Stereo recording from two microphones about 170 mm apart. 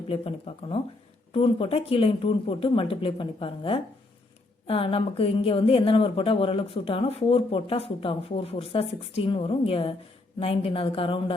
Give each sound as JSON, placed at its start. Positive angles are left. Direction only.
{"t": 0.1, "sound": "a woman's voice", "side_deg": 35}